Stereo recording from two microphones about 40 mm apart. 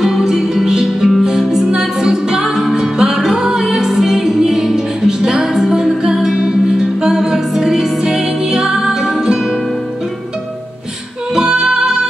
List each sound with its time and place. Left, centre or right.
0.0 s music: centre
11.3 s music: centre